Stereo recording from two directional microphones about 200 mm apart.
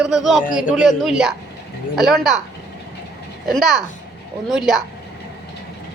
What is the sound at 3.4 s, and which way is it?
A man's voice, centre (ahead or behind).